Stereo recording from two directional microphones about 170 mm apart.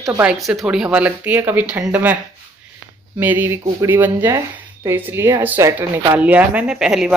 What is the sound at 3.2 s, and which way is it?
A woman's voice, 10° right (ahead or behind).